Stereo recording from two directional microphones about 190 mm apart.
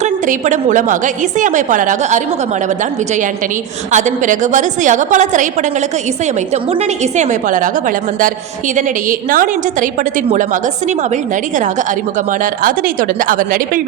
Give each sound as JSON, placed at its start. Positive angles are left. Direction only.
{"t": 0.0, "sound": "a woman's voice", "side_deg": -40}
{"t": 3.9, "sound": "a woman's voice", "side_deg": -40}
{"t": 6.5, "sound": "a woman's voice", "side_deg": -35}
{"t": 12.6, "sound": "a woman's voice", "side_deg": -45}